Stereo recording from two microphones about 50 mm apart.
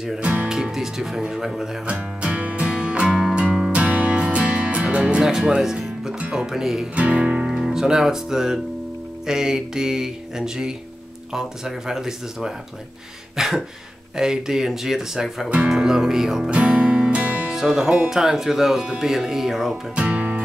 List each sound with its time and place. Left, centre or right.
0.2 s speech: right
0.5 s speech: centre
1.9 s music: right
5.2 s speech: centre
7.0 s speech: right; by 16.4 s centre
16.4 s music: right
17.5 s speech: centre
20.0 s guitar: right